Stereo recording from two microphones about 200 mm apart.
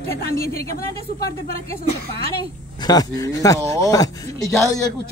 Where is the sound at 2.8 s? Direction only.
20° left (ahead or behind).